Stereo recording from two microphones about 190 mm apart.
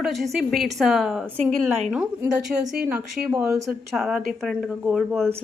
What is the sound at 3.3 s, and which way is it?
Speech, 15° right (ahead or behind).